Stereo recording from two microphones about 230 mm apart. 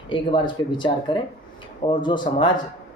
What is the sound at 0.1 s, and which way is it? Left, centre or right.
Speech, left.